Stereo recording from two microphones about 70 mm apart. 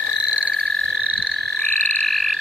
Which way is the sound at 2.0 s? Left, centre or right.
Centre.